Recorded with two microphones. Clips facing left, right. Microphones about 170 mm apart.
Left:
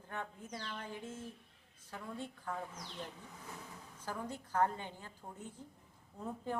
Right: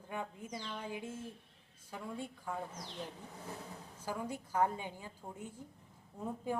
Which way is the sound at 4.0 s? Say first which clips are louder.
Right 2 dB; 10° right (ahead or behind).